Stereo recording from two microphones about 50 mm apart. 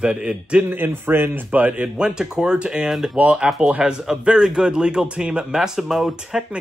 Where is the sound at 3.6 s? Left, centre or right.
Right.